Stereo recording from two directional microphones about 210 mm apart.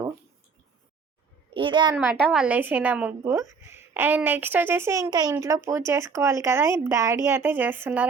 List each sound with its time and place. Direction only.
1.5 s a child's voice: 20° right (ahead or behind)
2.3 s speech: 5° right (ahead or behind)